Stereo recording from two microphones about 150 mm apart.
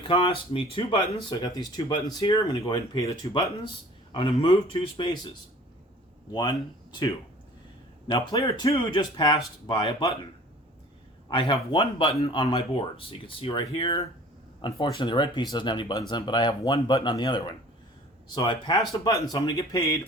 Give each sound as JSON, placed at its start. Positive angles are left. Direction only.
{"t": 0.0, "sound": "speech", "side_deg": 35}
{"t": 6.3, "sound": "speech", "side_deg": 30}
{"t": 8.0, "sound": "speech", "side_deg": 30}
{"t": 11.3, "sound": "speech", "side_deg": 35}